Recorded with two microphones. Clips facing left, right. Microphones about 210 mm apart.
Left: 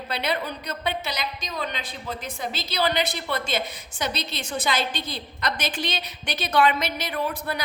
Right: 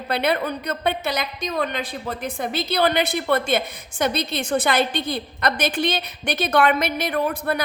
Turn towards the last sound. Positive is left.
turn(degrees=-55)  # may be behind; listen again after turning